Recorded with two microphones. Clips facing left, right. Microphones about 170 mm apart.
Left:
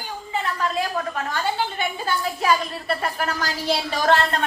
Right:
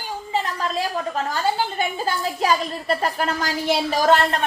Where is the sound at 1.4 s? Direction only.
35° right (ahead or behind).